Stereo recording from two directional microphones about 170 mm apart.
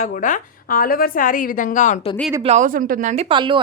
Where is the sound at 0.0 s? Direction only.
50° left (ahead or behind).